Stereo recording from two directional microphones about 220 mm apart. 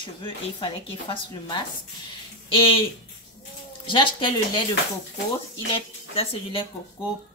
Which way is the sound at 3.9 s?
20° left (ahead or behind).